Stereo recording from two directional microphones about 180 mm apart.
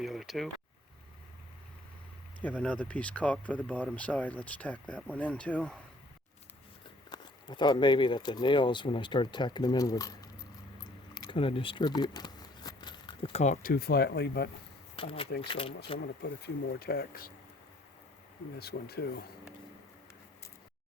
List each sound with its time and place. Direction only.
0.0 s a sound: centre (ahead or behind)
2.4 s speech: 5° left (ahead or behind)
7.1 s speech: 25° left (ahead or behind)
11.1 s a sound: 25° left (ahead or behind)
13.4 s speech: 45° left (ahead or behind); by 14.5 s 65° left (ahead or behind)
14.9 s speech: 30° left (ahead or behind)
16.2 s speech: 70° left (ahead or behind)
16.8 s speech: 60° left (ahead or behind)
18.5 s speech: 60° left (ahead or behind)